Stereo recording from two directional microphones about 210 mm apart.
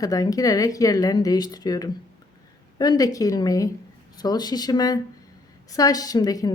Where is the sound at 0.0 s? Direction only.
15° left (ahead or behind).